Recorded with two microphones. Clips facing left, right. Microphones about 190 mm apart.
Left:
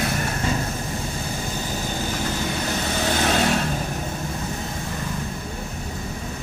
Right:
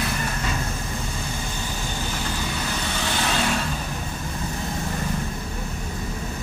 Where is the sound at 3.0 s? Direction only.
45° left (ahead or behind).